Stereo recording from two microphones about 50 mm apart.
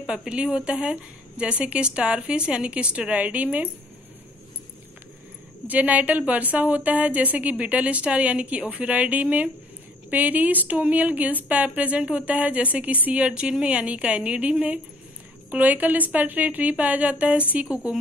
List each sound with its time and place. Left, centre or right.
0.0 s a woman's voice: centre
5.7 s a woman's voice: right